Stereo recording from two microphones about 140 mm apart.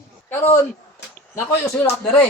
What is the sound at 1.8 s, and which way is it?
Speech, 15° left (ahead or behind).